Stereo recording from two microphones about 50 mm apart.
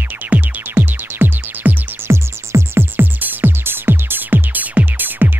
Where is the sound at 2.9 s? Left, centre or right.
Right.